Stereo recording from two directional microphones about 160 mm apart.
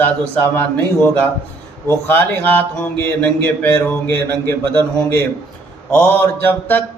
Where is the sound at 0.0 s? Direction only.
15° left (ahead or behind).